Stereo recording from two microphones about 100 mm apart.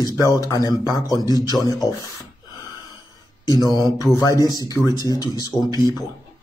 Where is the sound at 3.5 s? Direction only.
40° left (ahead or behind).